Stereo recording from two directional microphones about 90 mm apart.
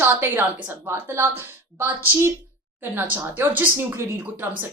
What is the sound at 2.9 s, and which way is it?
A woman's voice, 20° right (ahead or behind).